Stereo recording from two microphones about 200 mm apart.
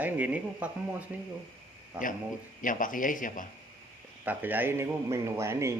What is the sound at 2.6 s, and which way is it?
Speech, 40° left (ahead or behind).